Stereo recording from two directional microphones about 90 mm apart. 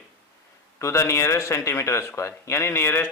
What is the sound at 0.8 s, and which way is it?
A man's voice, 35° left (ahead or behind).